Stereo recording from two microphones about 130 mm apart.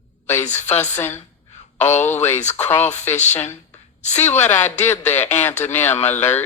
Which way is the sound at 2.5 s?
15° left (ahead or behind).